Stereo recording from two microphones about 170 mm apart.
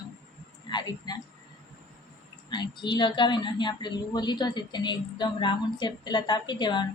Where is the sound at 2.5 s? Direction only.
25° left (ahead or behind).